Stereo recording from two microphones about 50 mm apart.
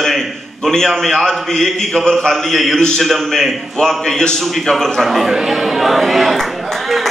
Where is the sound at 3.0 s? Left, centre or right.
Centre.